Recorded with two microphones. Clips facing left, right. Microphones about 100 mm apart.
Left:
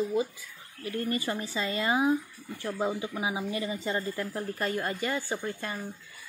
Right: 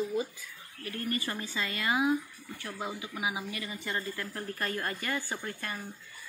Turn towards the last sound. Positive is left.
turn(degrees=20)  # may be behind; listen again after turning